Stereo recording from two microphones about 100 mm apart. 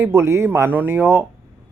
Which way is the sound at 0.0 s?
25° right (ahead or behind).